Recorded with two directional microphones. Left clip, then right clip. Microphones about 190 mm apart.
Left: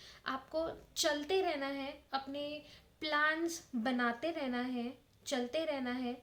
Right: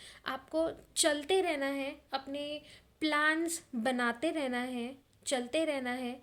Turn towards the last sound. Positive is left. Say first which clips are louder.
# right 3 dB
turn(degrees=-45)  # may be behind; listen again after turning